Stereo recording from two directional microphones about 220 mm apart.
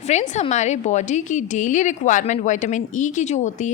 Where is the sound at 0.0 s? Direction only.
30° left (ahead or behind).